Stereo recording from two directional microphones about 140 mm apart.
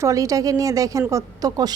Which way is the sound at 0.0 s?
25° right (ahead or behind).